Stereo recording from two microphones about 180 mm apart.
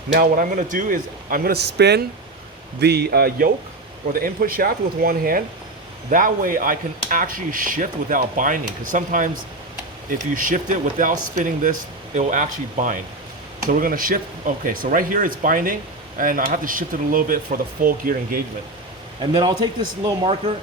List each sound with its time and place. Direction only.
0.1 s speech: 50° right (ahead or behind)
19.2 s a man's voice: 25° right (ahead or behind)